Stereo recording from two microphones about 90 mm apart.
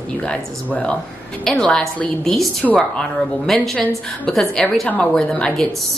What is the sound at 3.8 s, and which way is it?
Speech, 15° left (ahead or behind).